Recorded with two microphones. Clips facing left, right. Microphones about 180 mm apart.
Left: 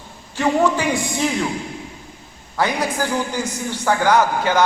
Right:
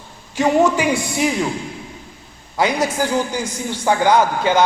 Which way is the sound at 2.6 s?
15° right (ahead or behind).